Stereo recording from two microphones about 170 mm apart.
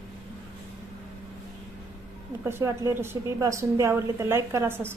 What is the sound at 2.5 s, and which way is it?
A woman's voice, 15° right (ahead or behind).